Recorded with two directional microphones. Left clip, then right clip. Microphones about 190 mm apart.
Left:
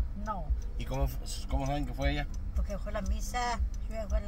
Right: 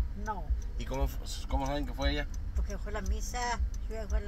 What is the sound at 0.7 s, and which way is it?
Speech, 30° left (ahead or behind).